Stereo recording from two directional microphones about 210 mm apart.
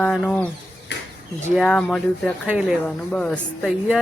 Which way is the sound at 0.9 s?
55° left (ahead or behind).